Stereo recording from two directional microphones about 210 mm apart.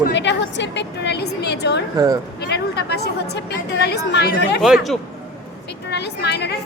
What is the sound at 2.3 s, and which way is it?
A woman's voice, 50° left (ahead or behind).